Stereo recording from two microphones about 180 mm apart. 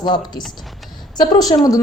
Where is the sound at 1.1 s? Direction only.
20° left (ahead or behind).